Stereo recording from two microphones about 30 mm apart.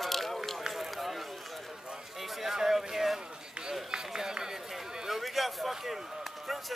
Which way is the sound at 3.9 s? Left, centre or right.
Right.